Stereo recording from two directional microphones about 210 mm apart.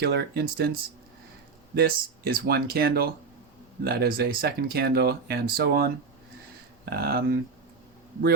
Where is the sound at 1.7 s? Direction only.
50° right (ahead or behind).